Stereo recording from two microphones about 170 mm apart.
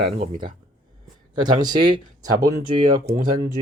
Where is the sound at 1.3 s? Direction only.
25° right (ahead or behind).